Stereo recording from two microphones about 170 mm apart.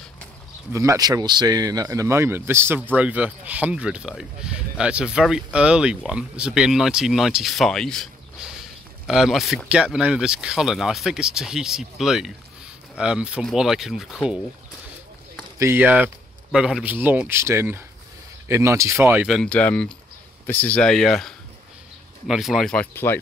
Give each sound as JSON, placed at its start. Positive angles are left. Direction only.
{"t": 0.7, "sound": "speech", "side_deg": -20}
{"t": 15.6, "sound": "speech", "side_deg": -10}
{"t": 19.3, "sound": "speech", "side_deg": 5}